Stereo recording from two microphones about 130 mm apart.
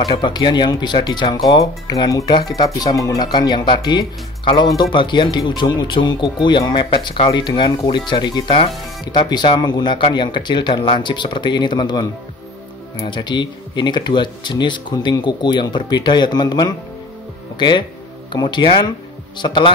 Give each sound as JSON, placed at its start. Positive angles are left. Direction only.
{"t": 0.1, "sound": "speech", "side_deg": 35}